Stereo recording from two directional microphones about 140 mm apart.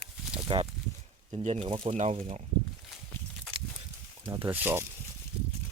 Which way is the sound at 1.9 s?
60° right (ahead or behind).